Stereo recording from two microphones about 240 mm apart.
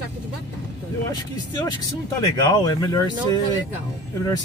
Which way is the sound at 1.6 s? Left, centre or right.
Centre.